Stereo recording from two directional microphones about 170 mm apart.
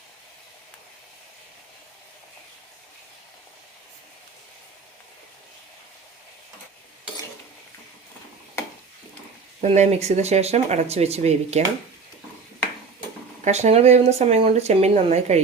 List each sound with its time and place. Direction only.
9.6 s speech: 40° right (ahead or behind)
13.4 s speech: 40° right (ahead or behind)